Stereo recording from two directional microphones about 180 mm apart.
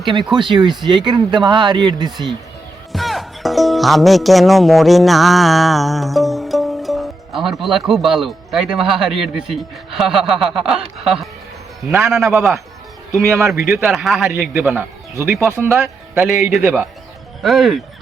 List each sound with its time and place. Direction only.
0.3 s speech: 25° right (ahead or behind)
2.9 s music: centre (ahead or behind)
7.6 s a man's voice: centre (ahead or behind)
13.5 s a man's voice: centre (ahead or behind)
17.4 s a man's voice: centre (ahead or behind)